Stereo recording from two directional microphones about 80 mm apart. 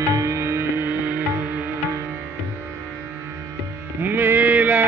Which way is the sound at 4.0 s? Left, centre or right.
Right.